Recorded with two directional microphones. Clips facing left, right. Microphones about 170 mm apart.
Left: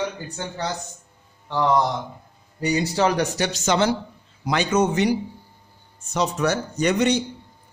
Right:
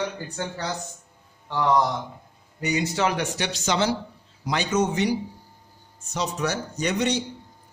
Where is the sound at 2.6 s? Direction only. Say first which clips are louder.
Left 3 dB; 35° left (ahead or behind); by 5.1 s 55° left (ahead or behind).